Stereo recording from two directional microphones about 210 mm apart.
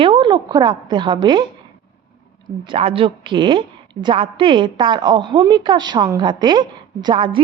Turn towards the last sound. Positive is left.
turn(degrees=-25)  # may be behind; listen again after turning